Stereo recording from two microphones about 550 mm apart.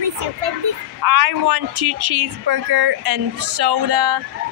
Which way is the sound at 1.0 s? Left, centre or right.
Right.